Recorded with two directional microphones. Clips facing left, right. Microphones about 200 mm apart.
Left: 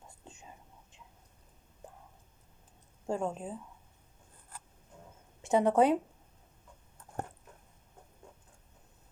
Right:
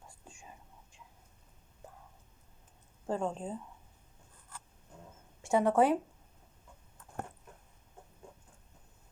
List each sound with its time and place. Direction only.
0.2 s whispering: 20° left (ahead or behind)
3.1 s speech: 10° left (ahead or behind)
5.4 s speech: 20° left (ahead or behind)